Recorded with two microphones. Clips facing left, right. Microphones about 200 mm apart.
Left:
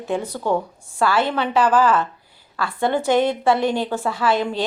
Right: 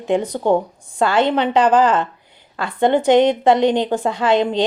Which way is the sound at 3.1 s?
20° right (ahead or behind).